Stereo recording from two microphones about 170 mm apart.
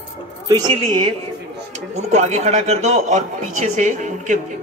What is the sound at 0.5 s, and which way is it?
Speech, 25° right (ahead or behind).